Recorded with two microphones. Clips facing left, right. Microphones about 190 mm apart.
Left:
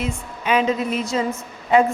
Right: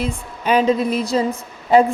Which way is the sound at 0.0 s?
35° right (ahead or behind).